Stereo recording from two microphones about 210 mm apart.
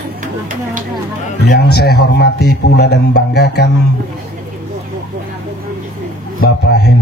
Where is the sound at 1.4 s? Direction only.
50° left (ahead or behind).